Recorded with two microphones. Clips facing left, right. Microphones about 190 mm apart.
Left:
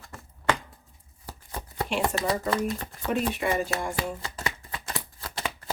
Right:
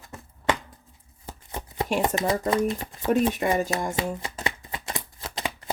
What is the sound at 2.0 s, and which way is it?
Speech, 20° right (ahead or behind).